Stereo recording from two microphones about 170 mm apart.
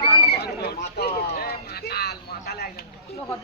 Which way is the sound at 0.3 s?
70° left (ahead or behind).